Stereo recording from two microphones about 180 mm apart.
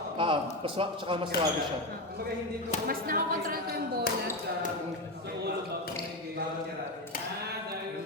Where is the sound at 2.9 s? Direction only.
55° right (ahead or behind).